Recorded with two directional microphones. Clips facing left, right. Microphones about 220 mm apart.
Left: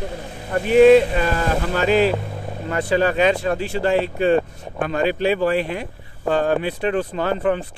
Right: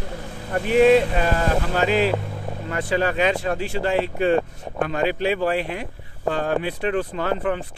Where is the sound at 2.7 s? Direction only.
35° left (ahead or behind).